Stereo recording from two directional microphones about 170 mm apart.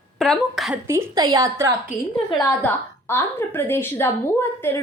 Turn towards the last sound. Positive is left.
turn(degrees=15)  # may be behind; listen again after turning